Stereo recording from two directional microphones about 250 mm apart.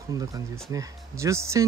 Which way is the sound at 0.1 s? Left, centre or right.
Centre.